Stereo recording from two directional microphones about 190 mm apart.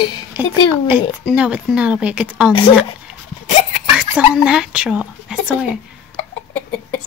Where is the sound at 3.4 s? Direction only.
35° left (ahead or behind).